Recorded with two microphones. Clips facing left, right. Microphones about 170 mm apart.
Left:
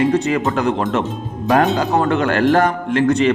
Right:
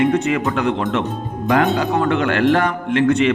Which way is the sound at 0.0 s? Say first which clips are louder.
Left 1 dB; 35° left (ahead or behind).